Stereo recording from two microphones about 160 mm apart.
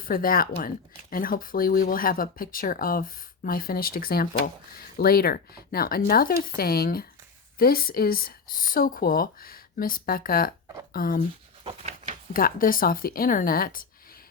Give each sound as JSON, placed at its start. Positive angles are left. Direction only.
{"t": 0.0, "sound": "speech", "side_deg": 65}
{"t": 11.6, "sound": "a sound", "side_deg": -40}
{"t": 12.3, "sound": "speech", "side_deg": 65}